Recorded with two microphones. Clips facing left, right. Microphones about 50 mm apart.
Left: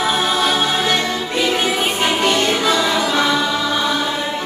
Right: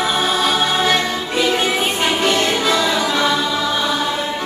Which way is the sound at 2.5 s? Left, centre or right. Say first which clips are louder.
Even; centre.